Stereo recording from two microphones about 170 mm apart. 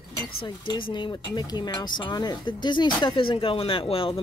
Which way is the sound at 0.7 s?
25° left (ahead or behind).